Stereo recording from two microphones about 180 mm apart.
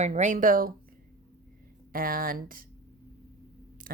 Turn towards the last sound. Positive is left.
turn(degrees=-55)  # may be behind; listen again after turning